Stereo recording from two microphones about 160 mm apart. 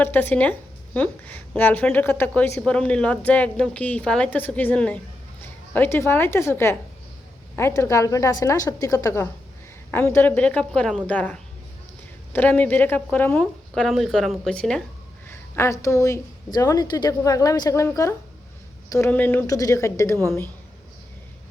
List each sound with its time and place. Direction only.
0.0 s speech: 10° left (ahead or behind)
7.8 s a woman's voice: 20° left (ahead or behind)
15.3 s a woman's voice: 15° left (ahead or behind)
18.9 s speech: 15° left (ahead or behind)